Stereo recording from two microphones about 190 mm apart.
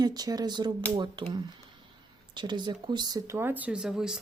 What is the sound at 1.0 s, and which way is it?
Speech, 20° right (ahead or behind).